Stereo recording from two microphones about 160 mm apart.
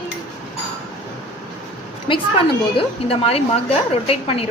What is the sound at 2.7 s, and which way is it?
A woman's voice, 35° left (ahead or behind).